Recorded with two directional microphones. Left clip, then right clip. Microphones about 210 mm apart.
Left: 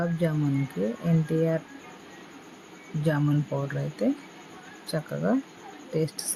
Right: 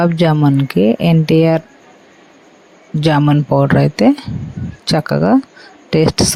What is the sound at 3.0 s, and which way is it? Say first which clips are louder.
Speech: right 14 dB; 45° right (ahead or behind).